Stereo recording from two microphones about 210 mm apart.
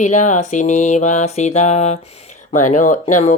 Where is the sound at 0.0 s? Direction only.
35° left (ahead or behind).